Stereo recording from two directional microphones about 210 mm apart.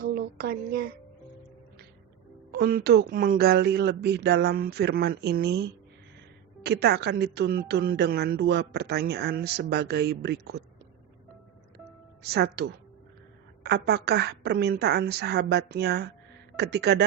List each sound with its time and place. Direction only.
0.0 s speech: 45° right (ahead or behind)
2.5 s a woman's voice: 45° right (ahead or behind)
12.2 s a woman's voice: 50° right (ahead or behind)